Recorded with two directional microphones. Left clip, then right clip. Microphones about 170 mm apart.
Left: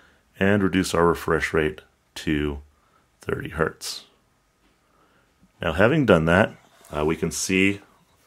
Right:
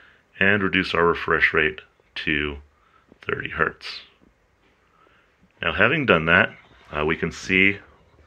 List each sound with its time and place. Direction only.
0.4 s speech: 50° left (ahead or behind)
5.6 s speech: 50° left (ahead or behind)
6.9 s speech: 25° left (ahead or behind)